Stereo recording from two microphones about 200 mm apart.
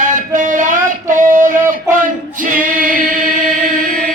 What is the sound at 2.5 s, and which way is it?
Singing, 40° right (ahead or behind).